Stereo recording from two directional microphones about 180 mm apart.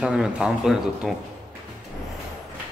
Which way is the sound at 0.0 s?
5° right (ahead or behind).